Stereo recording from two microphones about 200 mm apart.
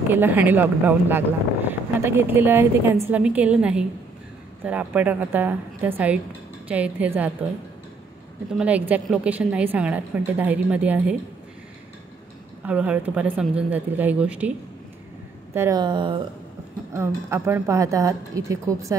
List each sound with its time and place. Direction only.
0.1 s speech: 10° right (ahead or behind)
8.5 s speech: 5° right (ahead or behind)
12.6 s speech: 5° right (ahead or behind)
15.5 s speech: 15° right (ahead or behind)
16.9 s speech: 15° right (ahead or behind)